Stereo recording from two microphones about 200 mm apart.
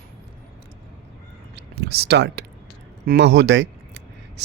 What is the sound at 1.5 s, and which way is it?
Speech, 55° right (ahead or behind).